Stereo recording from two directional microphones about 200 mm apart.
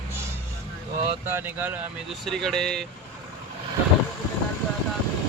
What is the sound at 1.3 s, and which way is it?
A man's voice, 10° right (ahead or behind).